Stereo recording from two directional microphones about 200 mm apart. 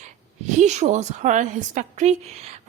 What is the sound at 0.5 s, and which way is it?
A woman's voice, 35° right (ahead or behind).